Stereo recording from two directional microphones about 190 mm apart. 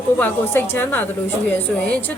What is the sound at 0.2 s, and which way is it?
A woman's voice, 10° left (ahead or behind).